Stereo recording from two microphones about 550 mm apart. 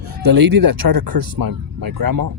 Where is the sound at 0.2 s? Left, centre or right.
Right.